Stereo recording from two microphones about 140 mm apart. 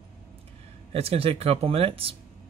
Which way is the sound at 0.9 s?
45° right (ahead or behind).